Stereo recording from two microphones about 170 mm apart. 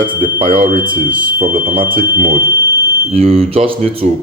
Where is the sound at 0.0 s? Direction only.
55° right (ahead or behind).